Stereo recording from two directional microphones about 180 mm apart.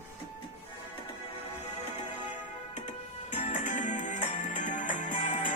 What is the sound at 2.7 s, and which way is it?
Music, 40° left (ahead or behind).